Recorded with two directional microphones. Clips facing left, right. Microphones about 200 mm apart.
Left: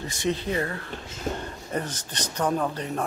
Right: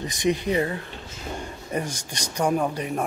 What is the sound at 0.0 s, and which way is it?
Speech, 15° right (ahead or behind).